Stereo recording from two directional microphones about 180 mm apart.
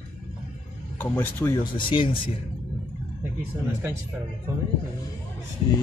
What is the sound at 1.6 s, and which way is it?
Speech, 25° left (ahead or behind).